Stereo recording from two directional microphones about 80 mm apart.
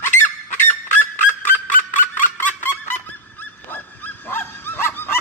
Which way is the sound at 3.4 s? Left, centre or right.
Left.